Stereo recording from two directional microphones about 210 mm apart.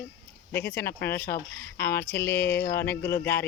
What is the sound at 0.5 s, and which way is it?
Speech, 10° left (ahead or behind).